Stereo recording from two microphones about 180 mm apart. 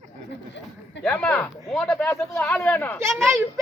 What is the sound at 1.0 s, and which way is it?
Speech, 5° left (ahead or behind).